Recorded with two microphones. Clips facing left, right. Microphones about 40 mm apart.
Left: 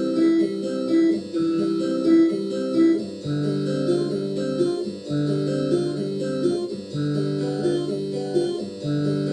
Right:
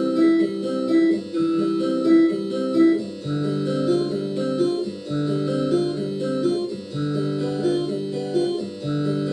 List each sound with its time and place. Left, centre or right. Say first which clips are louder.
0.0 s music: right 1 dB; centre